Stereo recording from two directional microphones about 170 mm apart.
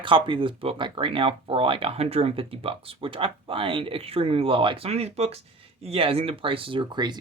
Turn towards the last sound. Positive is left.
turn(degrees=-25)  # may be behind; listen again after turning